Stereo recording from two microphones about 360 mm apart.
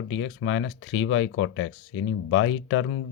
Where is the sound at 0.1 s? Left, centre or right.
Left.